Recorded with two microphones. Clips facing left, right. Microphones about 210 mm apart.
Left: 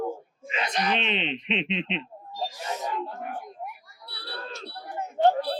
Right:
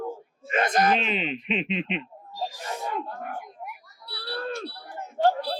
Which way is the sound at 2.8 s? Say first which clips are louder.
Right 1 dB; 50° right (ahead or behind).